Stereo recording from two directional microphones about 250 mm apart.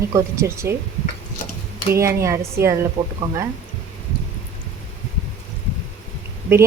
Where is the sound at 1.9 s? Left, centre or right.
Centre.